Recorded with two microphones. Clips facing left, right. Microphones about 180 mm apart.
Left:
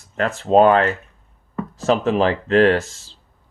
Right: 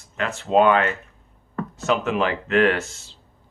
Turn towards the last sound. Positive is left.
turn(degrees=35)  # may be behind; listen again after turning